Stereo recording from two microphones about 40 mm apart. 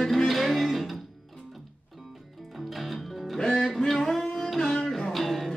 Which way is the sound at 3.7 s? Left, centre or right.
Centre.